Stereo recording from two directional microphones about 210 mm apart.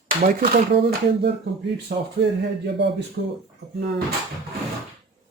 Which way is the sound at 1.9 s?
40° right (ahead or behind).